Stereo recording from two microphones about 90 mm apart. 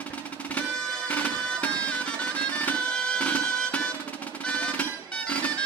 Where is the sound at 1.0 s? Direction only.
15° left (ahead or behind).